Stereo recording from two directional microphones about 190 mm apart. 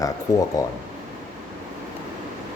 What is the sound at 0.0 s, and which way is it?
Speech, 20° left (ahead or behind).